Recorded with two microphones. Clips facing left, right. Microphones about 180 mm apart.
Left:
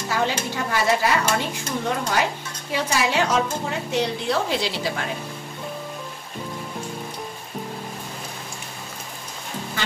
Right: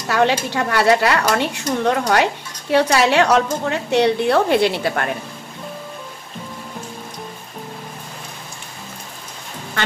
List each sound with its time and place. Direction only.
0.1 s a woman's voice: 70° right (ahead or behind)